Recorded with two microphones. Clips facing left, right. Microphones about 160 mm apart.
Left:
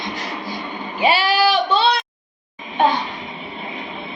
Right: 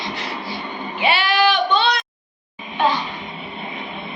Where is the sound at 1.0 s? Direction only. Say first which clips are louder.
Left 2 dB; 40° left (ahead or behind).